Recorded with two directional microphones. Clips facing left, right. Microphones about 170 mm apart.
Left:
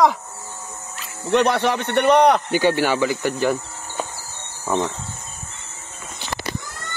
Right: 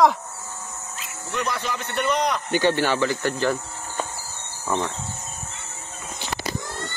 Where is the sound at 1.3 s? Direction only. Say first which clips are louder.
Left 10 dB; 70° left (ahead or behind).